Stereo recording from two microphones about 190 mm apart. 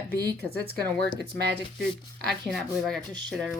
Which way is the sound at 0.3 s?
55° right (ahead or behind).